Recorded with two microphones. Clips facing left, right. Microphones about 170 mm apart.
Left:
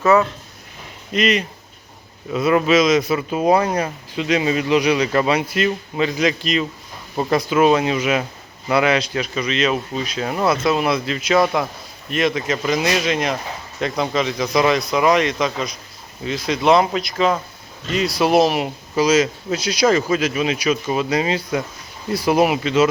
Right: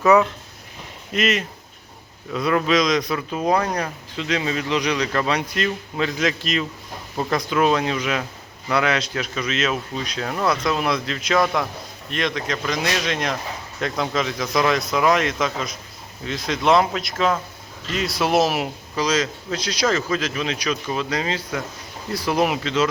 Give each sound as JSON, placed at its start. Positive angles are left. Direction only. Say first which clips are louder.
{"t": 0.1, "sound": "speech", "louder": "left 1 dB", "side_deg": -15}
{"t": 1.1, "sound": "speech", "louder": "left 3 dB", "side_deg": 0}
{"t": 2.3, "sound": "speech", "louder": "left 4 dB", "side_deg": 10}
{"t": 18.9, "sound": "speech", "louder": "left 6 dB", "side_deg": 10}